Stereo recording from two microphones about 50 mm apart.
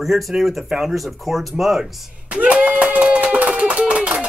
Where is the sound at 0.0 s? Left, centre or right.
Centre.